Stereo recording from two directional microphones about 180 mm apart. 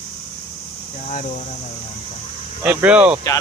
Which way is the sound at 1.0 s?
40° left (ahead or behind).